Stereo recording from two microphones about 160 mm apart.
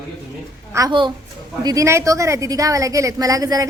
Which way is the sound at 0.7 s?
25° right (ahead or behind).